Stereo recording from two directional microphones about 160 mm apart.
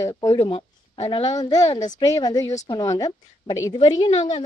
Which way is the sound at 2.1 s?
25° left (ahead or behind).